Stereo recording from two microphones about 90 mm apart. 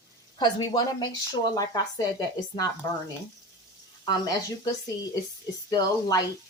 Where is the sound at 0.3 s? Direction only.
50° left (ahead or behind).